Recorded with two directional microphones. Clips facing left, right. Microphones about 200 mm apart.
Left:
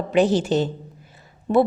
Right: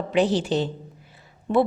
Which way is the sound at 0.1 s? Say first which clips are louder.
Left 3 dB; 45° left (ahead or behind).